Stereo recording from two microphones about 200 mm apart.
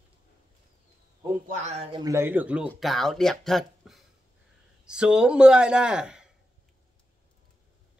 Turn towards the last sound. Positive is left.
turn(degrees=-5)  # may be behind; listen again after turning